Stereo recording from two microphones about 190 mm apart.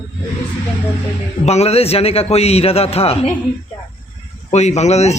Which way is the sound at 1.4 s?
35° left (ahead or behind).